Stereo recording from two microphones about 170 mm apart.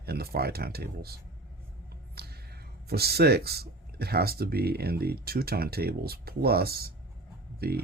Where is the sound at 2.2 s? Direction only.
70° right (ahead or behind).